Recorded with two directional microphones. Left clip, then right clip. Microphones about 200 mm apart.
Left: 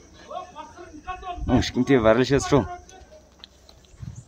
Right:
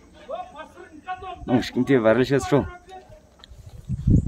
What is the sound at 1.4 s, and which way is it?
Speech, centre (ahead or behind).